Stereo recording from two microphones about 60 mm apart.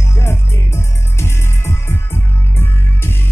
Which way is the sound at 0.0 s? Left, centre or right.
Left.